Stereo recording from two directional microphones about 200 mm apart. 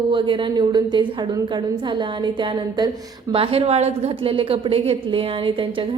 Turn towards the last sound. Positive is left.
turn(degrees=-25)  # may be behind; listen again after turning